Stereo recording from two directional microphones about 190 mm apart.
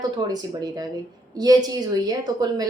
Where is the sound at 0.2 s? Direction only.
20° right (ahead or behind).